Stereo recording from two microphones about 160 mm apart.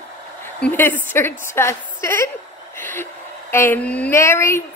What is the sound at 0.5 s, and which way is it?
A woman's voice, 10° left (ahead or behind).